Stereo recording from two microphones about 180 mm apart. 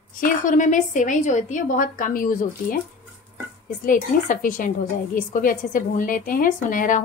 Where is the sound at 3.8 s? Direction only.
50° left (ahead or behind).